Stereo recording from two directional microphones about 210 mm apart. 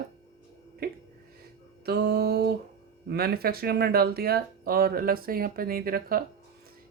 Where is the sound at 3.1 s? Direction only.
50° right (ahead or behind).